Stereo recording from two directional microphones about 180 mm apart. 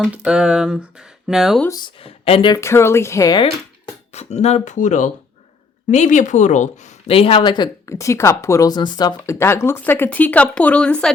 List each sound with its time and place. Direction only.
0.0 s speech: 5° right (ahead or behind)
1.6 s speech: 25° left (ahead or behind)
4.1 s speech: 40° left (ahead or behind); by 11.1 s 5° left (ahead or behind)